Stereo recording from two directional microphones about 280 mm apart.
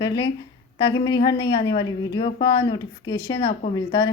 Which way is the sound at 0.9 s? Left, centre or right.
Centre.